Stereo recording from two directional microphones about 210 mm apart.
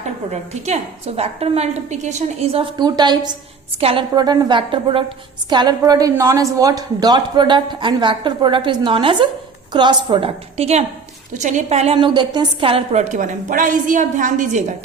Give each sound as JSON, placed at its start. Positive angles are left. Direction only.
{"t": 0.3, "sound": "a woman's voice", "side_deg": -30}